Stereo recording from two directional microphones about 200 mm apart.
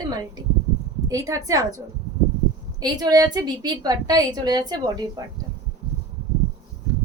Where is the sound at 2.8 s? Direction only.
20° right (ahead or behind).